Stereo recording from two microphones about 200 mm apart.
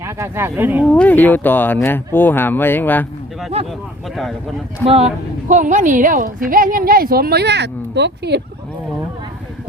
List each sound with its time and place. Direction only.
0.0 s speech: 15° right (ahead or behind)
0.9 s speech: 5° left (ahead or behind)
4.9 s a woman's voice: 30° right (ahead or behind); by 8.4 s 60° right (ahead or behind)